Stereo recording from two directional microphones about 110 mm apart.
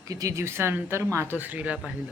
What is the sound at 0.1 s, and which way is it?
Speech, 30° right (ahead or behind).